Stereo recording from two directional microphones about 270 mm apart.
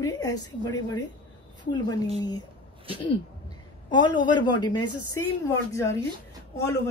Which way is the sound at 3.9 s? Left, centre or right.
Centre.